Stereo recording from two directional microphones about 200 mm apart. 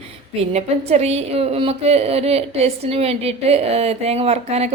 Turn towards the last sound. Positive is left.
turn(degrees=-30)  # may be behind; listen again after turning